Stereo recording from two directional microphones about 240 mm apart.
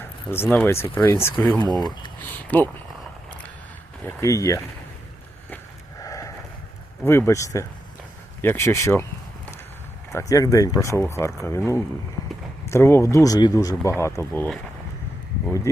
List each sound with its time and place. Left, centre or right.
0.0 s a sound: centre
0.4 s speech: centre
1.8 s speech: centre
2.5 s speech: centre
4.0 s speech: centre
6.0 s a sound: centre
7.0 s speech: centre
10.1 s speech: centre